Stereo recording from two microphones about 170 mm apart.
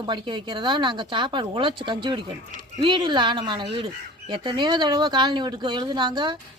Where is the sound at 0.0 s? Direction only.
25° right (ahead or behind).